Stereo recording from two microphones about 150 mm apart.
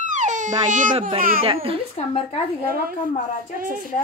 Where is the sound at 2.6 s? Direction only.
75° right (ahead or behind).